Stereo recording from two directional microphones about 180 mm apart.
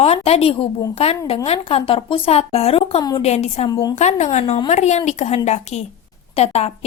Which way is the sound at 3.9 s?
40° left (ahead or behind).